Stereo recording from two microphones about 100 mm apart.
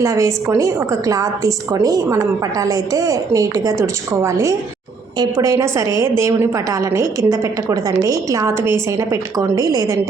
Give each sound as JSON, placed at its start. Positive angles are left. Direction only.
{"t": 0.0, "sound": "a woman's voice", "side_deg": -30}